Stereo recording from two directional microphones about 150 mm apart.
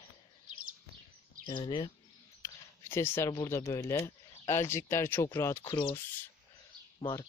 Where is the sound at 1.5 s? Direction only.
30° left (ahead or behind).